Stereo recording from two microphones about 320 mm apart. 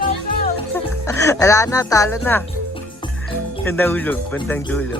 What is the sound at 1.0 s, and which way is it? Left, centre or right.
Speech, centre.